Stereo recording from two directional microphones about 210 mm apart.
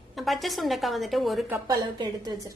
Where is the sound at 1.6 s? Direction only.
15° right (ahead or behind).